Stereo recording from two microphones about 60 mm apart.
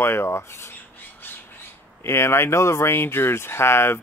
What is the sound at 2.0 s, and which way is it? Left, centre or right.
Speech, left.